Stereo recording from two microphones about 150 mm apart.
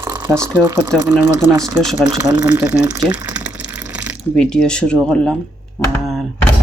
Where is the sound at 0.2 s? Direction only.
20° right (ahead or behind).